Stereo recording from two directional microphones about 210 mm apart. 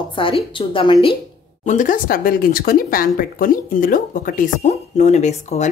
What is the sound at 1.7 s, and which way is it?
Speech, 40° left (ahead or behind).